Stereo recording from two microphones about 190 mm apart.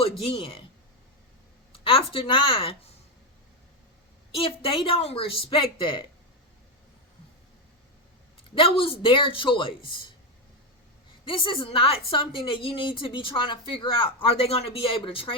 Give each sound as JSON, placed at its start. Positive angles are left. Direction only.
{"t": 0.0, "sound": "a woman's voice", "side_deg": 30}
{"t": 1.7, "sound": "a woman's voice", "side_deg": 30}
{"t": 4.4, "sound": "a woman's voice", "side_deg": 30}
{"t": 8.5, "sound": "a woman's voice", "side_deg": 30}
{"t": 11.3, "sound": "a woman's voice", "side_deg": 25}